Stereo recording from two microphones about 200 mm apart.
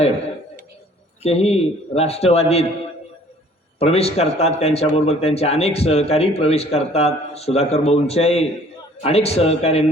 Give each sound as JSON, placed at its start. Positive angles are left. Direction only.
{"t": 1.2, "sound": "speech", "side_deg": 30}
{"t": 3.8, "sound": "speech", "side_deg": 30}